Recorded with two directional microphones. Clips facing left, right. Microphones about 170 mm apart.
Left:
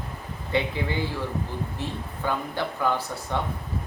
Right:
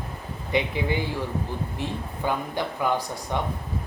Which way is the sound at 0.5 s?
15° right (ahead or behind).